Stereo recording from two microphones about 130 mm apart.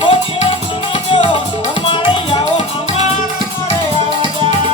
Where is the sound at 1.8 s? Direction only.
40° left (ahead or behind).